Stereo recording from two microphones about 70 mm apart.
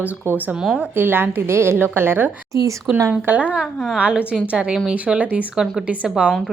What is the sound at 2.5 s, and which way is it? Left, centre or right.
Speech, right.